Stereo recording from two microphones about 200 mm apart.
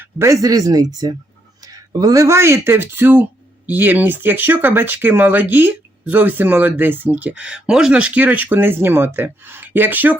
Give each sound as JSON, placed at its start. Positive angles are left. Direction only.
{"t": 0.0, "sound": "speech", "side_deg": -15}